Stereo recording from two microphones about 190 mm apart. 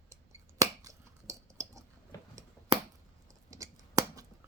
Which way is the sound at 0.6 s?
15° right (ahead or behind).